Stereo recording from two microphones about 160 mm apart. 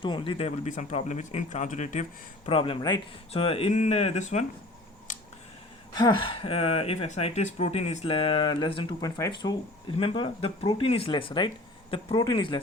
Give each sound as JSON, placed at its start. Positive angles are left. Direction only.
{"t": 0.0, "sound": "speech", "side_deg": 30}
{"t": 2.5, "sound": "speech", "side_deg": 35}
{"t": 5.1, "sound": "a sound", "side_deg": 50}
{"t": 5.9, "sound": "speech", "side_deg": 25}